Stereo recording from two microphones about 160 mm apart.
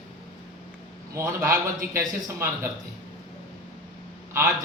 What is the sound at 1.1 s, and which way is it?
A man's voice, 20° right (ahead or behind).